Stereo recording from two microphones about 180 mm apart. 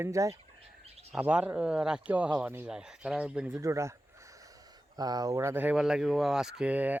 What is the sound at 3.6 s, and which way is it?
Speech, 15° right (ahead or behind).